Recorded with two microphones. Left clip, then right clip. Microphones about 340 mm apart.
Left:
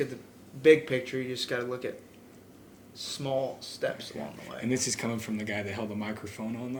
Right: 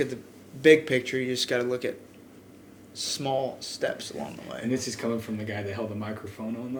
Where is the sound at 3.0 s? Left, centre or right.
Right.